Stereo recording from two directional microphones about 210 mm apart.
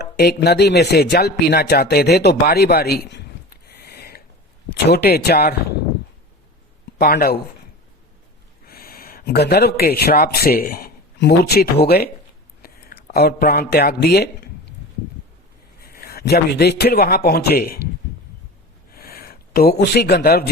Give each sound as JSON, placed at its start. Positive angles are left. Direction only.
{"t": 0.0, "sound": "speech", "side_deg": 50}
{"t": 3.7, "sound": "a sound", "side_deg": 50}
{"t": 4.9, "sound": "speech", "side_deg": 50}
{"t": 7.0, "sound": "speech", "side_deg": 45}
{"t": 8.6, "sound": "a man's voice", "side_deg": 45}
{"t": 15.9, "sound": "a man's voice", "side_deg": 45}
{"t": 18.9, "sound": "a sound", "side_deg": 45}